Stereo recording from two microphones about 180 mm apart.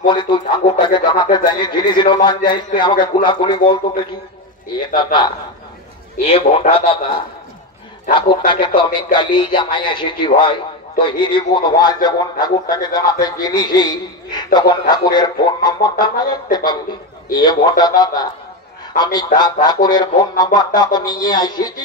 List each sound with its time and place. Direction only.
0.1 s a man's voice: 25° left (ahead or behind)
8.5 s a man's voice: 25° left (ahead or behind)
19.3 s a man's voice: 25° left (ahead or behind)